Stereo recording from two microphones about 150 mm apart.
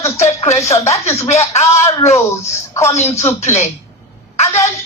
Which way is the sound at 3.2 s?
50° left (ahead or behind).